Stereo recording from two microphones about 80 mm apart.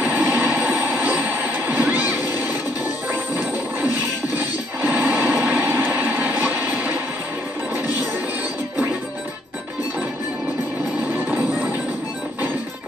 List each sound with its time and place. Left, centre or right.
0.0 s train: right
4.8 s train: right
11.1 s music: right